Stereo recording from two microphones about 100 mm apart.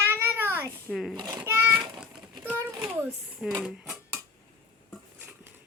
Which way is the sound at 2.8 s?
10° right (ahead or behind).